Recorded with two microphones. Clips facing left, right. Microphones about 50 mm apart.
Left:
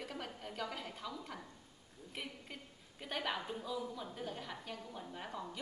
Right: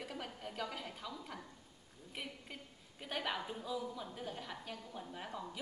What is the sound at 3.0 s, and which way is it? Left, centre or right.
A woman's voice, centre.